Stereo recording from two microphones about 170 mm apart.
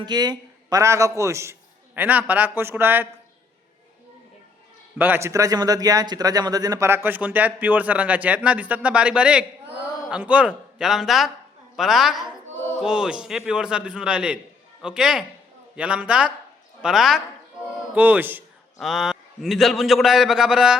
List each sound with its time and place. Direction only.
0.0 s speech: 25° right (ahead or behind)
4.9 s a man's voice: 10° right (ahead or behind)
18.8 s a man's voice: centre (ahead or behind)